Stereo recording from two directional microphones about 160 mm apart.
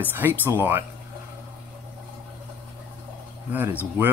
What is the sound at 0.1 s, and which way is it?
Speech, 10° right (ahead or behind).